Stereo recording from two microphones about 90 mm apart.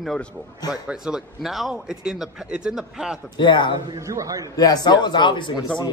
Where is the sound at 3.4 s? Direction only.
60° left (ahead or behind).